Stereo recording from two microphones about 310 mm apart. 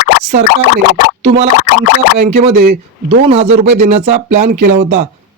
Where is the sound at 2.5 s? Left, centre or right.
Right.